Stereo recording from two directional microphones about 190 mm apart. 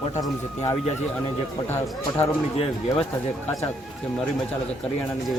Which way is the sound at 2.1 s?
30° left (ahead or behind).